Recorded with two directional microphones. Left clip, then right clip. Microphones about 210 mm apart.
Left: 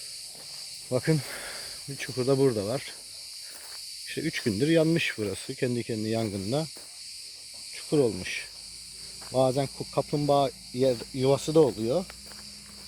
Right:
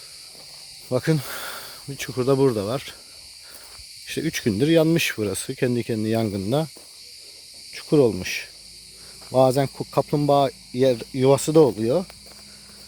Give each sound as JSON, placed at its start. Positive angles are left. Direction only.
{"t": 0.9, "sound": "speech", "side_deg": -25}
{"t": 4.1, "sound": "speech", "side_deg": -30}
{"t": 7.7, "sound": "cricket", "side_deg": -35}
{"t": 9.3, "sound": "speech", "side_deg": -40}